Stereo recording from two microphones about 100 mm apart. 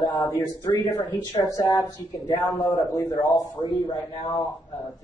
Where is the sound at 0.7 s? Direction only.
45° left (ahead or behind).